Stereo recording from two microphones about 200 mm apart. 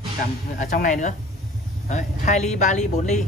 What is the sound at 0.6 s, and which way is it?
Speech, 40° left (ahead or behind).